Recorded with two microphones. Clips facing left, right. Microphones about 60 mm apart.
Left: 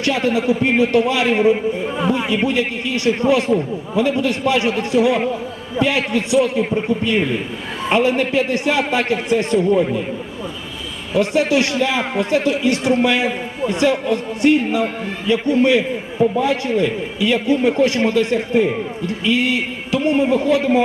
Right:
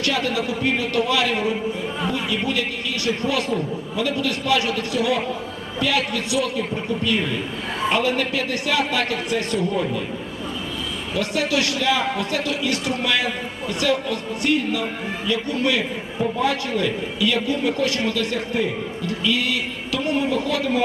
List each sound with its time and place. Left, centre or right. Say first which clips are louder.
0.0 s a man's voice: left 5 dB; left
11.1 s a man's voice: left 7 dB; left